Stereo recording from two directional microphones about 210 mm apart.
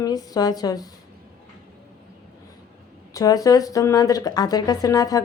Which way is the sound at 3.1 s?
15° left (ahead or behind).